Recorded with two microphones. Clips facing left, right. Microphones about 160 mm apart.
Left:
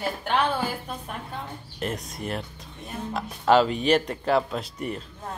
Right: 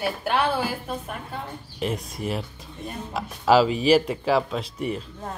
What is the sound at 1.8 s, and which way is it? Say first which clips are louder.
Speech: right 3 dB; centre (ahead or behind).